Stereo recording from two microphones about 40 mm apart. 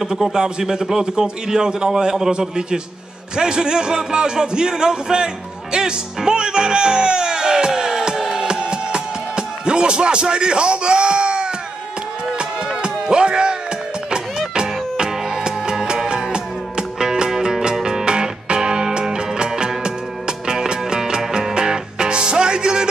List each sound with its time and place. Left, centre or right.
0.0 s a man's voice: centre
12.6 s music: centre